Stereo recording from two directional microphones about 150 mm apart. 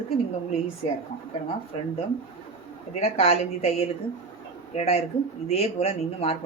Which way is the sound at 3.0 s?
45° left (ahead or behind).